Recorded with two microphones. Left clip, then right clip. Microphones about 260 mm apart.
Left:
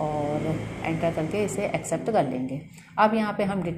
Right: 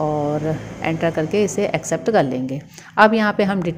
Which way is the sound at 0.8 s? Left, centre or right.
Right.